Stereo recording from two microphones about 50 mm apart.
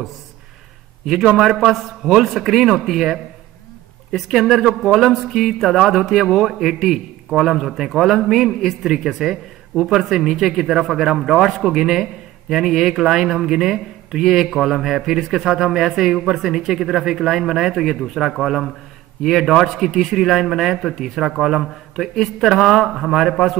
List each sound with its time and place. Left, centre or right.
1.7 s speech: centre
4.4 s speech: centre
9.8 s speech: centre